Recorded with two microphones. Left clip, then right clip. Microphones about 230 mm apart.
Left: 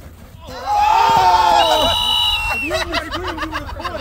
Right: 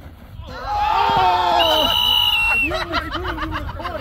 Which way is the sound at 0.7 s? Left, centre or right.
Left.